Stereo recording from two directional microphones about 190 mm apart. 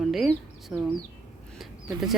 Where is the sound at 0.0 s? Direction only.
Centre (ahead or behind).